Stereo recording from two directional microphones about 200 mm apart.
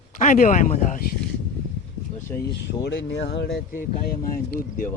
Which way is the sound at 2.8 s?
60° left (ahead or behind).